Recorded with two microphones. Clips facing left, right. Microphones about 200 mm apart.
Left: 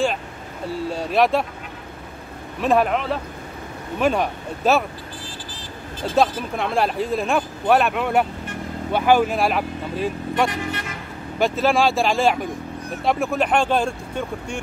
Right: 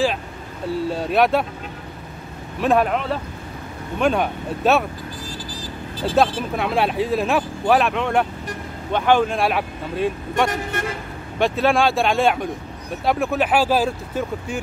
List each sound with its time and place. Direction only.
0.8 s speech: centre (ahead or behind)
2.6 s speech: centre (ahead or behind)
6.0 s speech: centre (ahead or behind)
10.5 s speech: 50° right (ahead or behind)
11.3 s speech: centre (ahead or behind)